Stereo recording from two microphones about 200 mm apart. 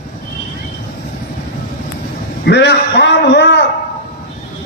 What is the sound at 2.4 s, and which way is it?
A man's voice, 60° left (ahead or behind).